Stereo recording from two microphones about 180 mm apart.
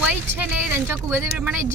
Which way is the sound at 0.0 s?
10° right (ahead or behind).